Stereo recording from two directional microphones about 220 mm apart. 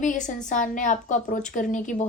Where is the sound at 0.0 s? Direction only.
35° left (ahead or behind).